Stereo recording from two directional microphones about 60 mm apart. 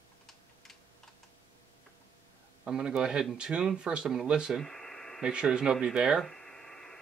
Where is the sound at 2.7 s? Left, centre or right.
Centre.